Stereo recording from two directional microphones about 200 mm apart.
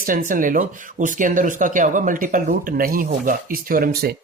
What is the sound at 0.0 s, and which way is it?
Speech, 45° right (ahead or behind).